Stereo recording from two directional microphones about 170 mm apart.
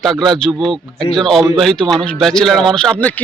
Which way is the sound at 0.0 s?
Centre (ahead or behind).